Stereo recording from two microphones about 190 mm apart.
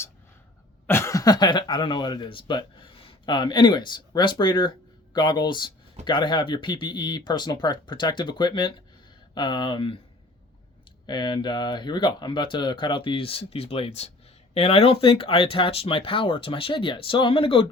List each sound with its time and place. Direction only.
0.9 s speech: 15° left (ahead or behind)
11.0 s speech: 20° left (ahead or behind)